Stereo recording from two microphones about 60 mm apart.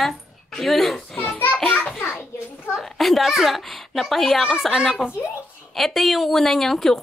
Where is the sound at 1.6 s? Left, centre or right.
Centre.